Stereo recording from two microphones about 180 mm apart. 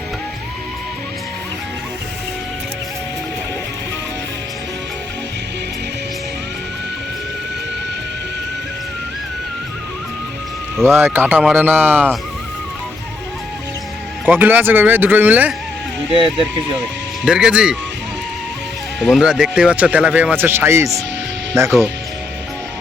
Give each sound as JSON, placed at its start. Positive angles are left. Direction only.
{"t": 10.8, "sound": "speech", "side_deg": -10}
{"t": 14.3, "sound": "speech", "side_deg": -10}
{"t": 16.1, "sound": "speech", "side_deg": -30}
{"t": 17.2, "sound": "speech", "side_deg": -5}
{"t": 18.9, "sound": "speech", "side_deg": 0}